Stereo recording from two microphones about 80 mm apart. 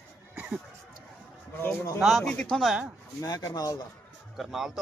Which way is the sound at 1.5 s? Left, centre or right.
Left.